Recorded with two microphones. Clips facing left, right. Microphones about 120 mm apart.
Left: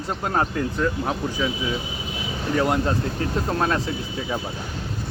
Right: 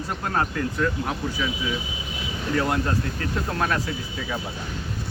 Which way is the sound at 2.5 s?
20° left (ahead or behind).